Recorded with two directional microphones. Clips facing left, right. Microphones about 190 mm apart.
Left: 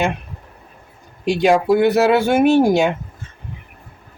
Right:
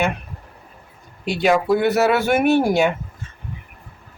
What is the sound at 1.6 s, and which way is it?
Speech, 15° left (ahead or behind).